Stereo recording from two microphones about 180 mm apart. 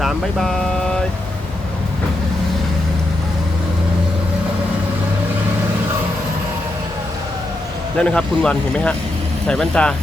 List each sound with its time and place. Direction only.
0.0 s vehicle: centre (ahead or behind)
7.9 s speech: 5° left (ahead or behind)